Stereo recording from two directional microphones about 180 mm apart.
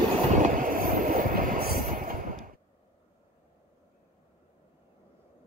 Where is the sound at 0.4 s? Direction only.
50° right (ahead or behind).